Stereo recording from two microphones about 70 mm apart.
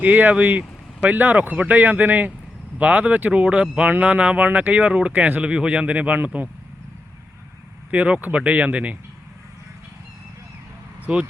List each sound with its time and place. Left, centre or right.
0.0 s speech: right
7.9 s speech: centre
11.0 s speech: centre